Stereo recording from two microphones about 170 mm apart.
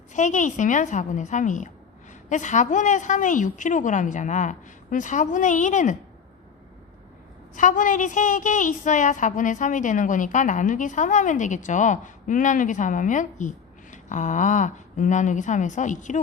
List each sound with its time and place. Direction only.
0.1 s a woman's voice: 45° left (ahead or behind)
7.5 s a woman's voice: 50° left (ahead or behind)